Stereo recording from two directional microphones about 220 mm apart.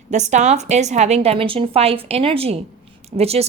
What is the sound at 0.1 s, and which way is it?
A woman's voice, 30° right (ahead or behind).